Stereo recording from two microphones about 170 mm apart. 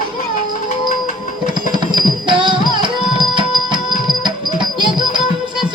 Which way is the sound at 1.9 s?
30° right (ahead or behind).